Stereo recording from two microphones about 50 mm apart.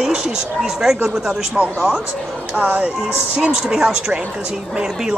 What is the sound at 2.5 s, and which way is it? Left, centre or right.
Speech, right.